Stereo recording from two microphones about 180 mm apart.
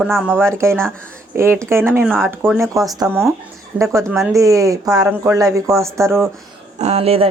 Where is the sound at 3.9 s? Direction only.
15° right (ahead or behind).